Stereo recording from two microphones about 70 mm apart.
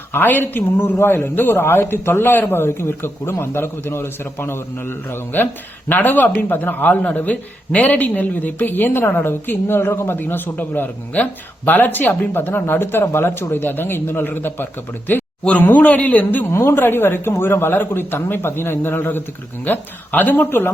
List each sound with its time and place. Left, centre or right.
0.1 s speech: left
16.5 s speech: left